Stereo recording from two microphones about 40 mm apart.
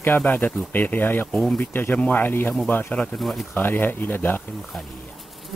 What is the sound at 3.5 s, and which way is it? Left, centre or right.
Speech, left.